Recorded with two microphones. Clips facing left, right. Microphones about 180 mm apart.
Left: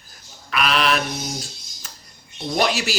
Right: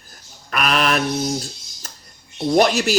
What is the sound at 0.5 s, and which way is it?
Speech, 45° right (ahead or behind).